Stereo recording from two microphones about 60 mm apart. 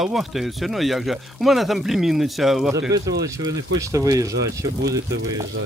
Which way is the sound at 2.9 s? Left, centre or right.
Right.